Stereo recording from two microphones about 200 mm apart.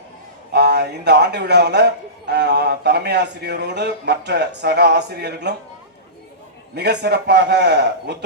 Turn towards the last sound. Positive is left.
turn(degrees=-55)  # may be behind; listen again after turning